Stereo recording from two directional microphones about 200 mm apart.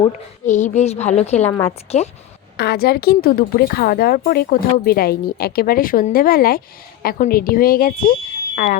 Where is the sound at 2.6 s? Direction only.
55° left (ahead or behind).